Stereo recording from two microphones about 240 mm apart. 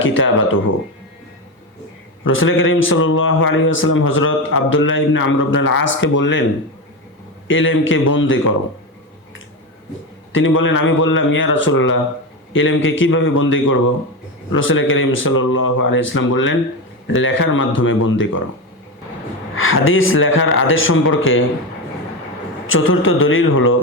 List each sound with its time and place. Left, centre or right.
0.0 s a man's voice: left
2.2 s a man's voice: left
7.4 s a man's voice: left
10.3 s a man's voice: left
19.5 s speech: left
22.6 s speech: left